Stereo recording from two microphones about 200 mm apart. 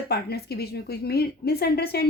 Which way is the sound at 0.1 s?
55° left (ahead or behind).